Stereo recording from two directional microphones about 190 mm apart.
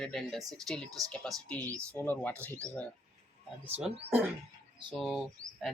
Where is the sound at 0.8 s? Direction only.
20° right (ahead or behind).